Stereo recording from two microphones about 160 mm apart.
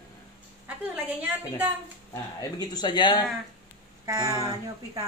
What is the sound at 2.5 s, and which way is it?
Speech, 25° left (ahead or behind).